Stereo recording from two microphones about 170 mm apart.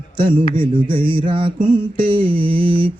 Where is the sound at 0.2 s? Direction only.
30° right (ahead or behind).